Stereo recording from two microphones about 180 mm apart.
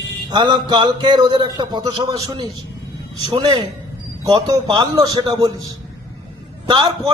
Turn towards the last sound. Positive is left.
turn(degrees=-25)  # may be behind; listen again after turning